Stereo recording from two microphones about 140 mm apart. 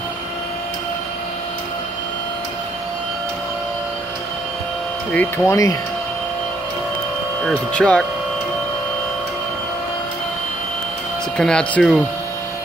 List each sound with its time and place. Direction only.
5.1 s speech: 15° left (ahead or behind)
7.4 s speech: 5° left (ahead or behind)
11.3 s speech: 5° left (ahead or behind)